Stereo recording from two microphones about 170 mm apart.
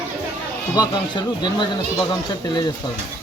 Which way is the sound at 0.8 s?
25° left (ahead or behind).